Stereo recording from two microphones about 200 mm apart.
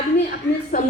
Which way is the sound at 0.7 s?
40° left (ahead or behind).